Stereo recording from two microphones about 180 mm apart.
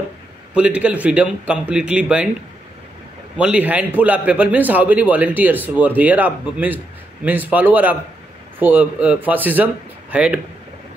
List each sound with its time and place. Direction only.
0.6 s a man's voice: 5° right (ahead or behind)
3.3 s a man's voice: 5° right (ahead or behind)